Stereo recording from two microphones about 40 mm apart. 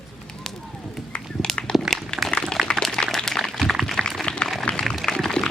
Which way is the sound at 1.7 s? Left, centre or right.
Centre.